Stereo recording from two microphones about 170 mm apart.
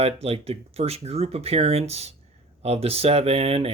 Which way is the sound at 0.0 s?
35° right (ahead or behind).